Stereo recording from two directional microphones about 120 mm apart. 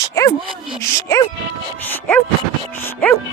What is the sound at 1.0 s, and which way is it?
Music, 25° left (ahead or behind).